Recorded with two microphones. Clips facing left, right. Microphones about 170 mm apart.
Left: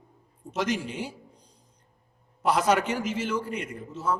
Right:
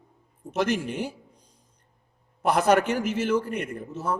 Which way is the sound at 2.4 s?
55° right (ahead or behind).